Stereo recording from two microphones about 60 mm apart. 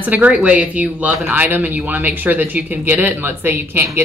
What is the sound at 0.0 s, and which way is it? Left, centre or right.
Speech, right.